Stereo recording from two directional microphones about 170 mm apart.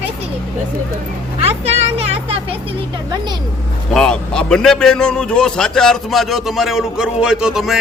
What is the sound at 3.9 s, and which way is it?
A man's voice, 5° left (ahead or behind).